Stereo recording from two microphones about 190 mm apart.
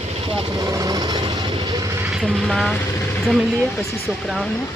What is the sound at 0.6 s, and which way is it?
Vehicle, 20° right (ahead or behind).